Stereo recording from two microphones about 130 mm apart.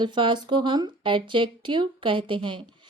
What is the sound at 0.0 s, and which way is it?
A woman's voice, 40° right (ahead or behind).